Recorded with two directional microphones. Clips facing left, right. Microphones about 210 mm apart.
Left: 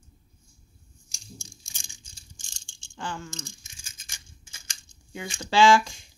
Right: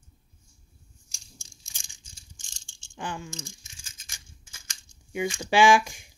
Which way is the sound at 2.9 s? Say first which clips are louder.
Even; 15° right (ahead or behind).